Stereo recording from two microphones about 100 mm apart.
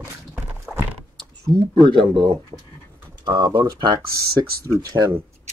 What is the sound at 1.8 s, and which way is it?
Speech, 55° right (ahead or behind).